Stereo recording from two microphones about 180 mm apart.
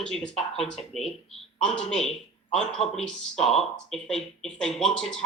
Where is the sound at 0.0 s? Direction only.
5° left (ahead or behind).